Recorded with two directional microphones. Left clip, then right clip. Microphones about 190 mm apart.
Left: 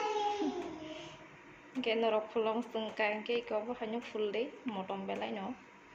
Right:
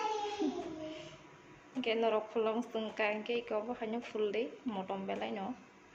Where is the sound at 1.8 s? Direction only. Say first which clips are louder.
Left 1 dB; centre (ahead or behind).